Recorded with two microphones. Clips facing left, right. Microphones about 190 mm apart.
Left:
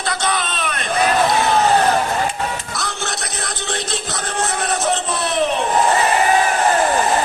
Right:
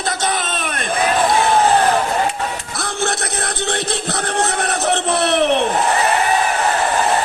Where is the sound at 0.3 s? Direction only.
50° right (ahead or behind).